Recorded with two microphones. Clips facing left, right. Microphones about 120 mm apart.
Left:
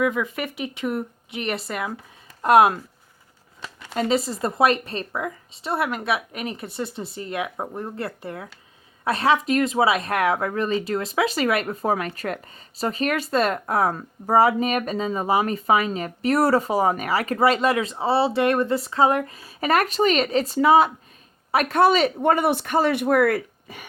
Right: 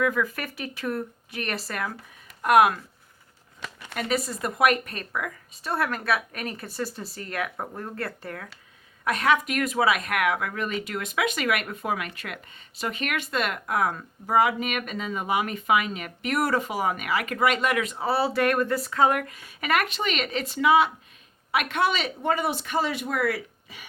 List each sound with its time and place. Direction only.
0.0 s speech: 20° left (ahead or behind)
2.4 s speech: 30° left (ahead or behind)
3.8 s speech: 25° left (ahead or behind)
22.2 s speech: 55° left (ahead or behind)